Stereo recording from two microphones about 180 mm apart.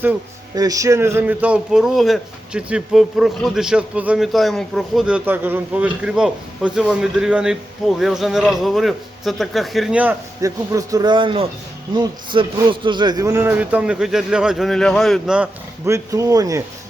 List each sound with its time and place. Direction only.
0.5 s a man's voice: 20° right (ahead or behind); by 15.4 s centre (ahead or behind)
15.9 s a man's voice: 20° right (ahead or behind)